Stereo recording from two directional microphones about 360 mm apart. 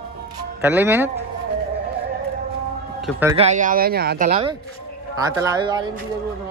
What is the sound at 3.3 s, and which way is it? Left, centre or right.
A man's voice, centre.